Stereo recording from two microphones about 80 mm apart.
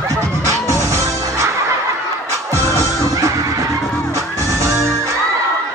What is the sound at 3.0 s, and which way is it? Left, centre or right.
Music, right.